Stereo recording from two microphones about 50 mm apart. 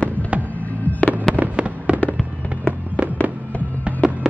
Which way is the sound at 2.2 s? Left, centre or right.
Left.